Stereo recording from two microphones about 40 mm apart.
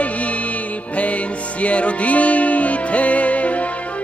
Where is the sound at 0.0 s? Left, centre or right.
Left.